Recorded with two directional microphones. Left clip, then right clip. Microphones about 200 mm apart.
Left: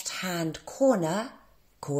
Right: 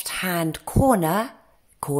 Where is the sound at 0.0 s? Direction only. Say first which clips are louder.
Right 6 dB; 25° right (ahead or behind).